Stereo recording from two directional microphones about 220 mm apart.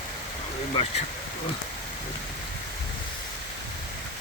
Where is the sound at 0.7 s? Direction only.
25° left (ahead or behind).